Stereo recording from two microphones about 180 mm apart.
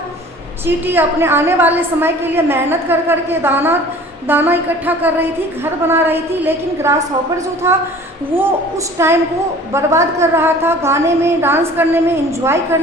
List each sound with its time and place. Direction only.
0.6 s a woman's voice: 10° right (ahead or behind)
9.0 s a woman's voice: 15° right (ahead or behind)